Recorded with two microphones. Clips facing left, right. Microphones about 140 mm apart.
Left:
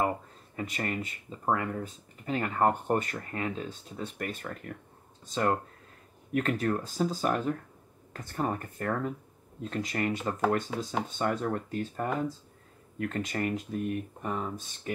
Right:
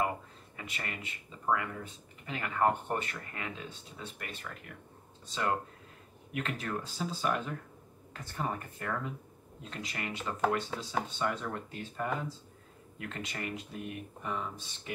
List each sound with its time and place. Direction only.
0.6 s speech: 40° left (ahead or behind)